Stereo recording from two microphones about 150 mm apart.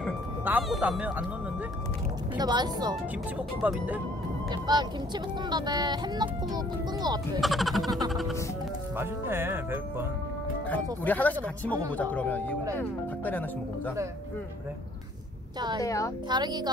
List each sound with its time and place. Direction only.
0.5 s speech: 5° right (ahead or behind)
2.3 s speech: 30° right (ahead or behind)
3.6 s speech: 10° right (ahead or behind)
4.5 s speech: 30° right (ahead or behind)
7.3 s speech: centre (ahead or behind)
8.9 s speech: 15° right (ahead or behind)
10.7 s speech: 10° left (ahead or behind)
15.8 s a woman's voice: 20° left (ahead or behind)
16.3 s speech: 30° right (ahead or behind)